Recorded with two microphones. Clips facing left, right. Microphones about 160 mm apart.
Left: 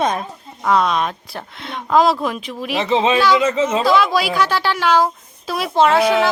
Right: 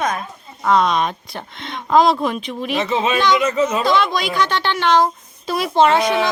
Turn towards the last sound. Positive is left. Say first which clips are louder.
# left 1 dB
turn(degrees=5)  # may be behind; listen again after turning